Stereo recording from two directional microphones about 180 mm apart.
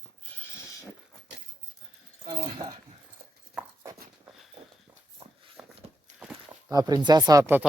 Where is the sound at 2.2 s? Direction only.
25° right (ahead or behind).